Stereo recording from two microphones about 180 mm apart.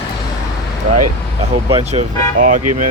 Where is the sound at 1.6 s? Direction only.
30° right (ahead or behind).